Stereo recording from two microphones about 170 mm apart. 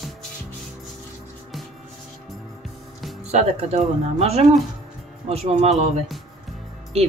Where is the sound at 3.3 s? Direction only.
40° right (ahead or behind).